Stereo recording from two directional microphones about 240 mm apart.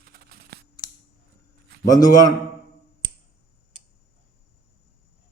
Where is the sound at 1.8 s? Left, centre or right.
Centre.